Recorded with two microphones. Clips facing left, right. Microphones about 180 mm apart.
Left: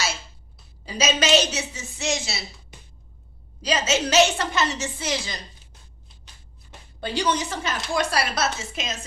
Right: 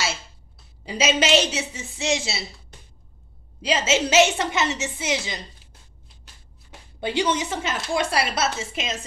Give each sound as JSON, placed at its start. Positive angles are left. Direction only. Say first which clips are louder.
{"t": 0.8, "sound": "a woman's voice", "louder": "right 1 dB", "side_deg": -25}
{"t": 3.6, "sound": "a woman's voice", "louder": "right 1 dB", "side_deg": -25}
{"t": 7.0, "sound": "a woman's voice", "louder": "right 1 dB", "side_deg": -20}